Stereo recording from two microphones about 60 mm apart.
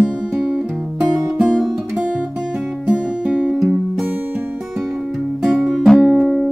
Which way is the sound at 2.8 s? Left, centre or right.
Centre.